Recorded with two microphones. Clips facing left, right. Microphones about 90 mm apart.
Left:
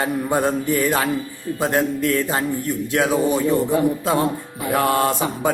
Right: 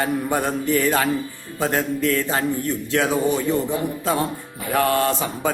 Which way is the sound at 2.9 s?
20° left (ahead or behind).